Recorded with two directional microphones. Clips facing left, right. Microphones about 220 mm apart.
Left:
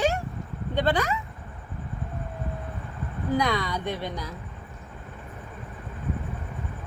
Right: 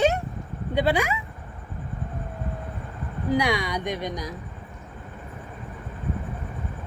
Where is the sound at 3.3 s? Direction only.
15° right (ahead or behind).